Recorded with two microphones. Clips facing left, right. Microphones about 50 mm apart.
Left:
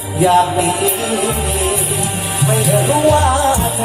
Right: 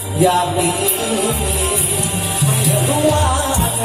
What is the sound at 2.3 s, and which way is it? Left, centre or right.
Music, left.